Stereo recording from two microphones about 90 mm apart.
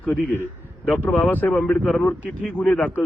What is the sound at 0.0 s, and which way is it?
A man's voice, 15° left (ahead or behind).